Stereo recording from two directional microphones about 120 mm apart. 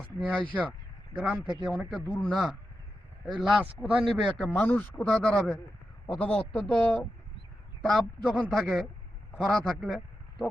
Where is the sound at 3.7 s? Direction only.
5° left (ahead or behind).